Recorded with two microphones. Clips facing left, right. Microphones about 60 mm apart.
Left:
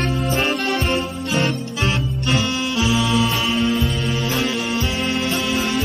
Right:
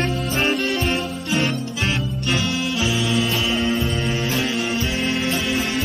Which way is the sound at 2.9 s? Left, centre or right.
Centre.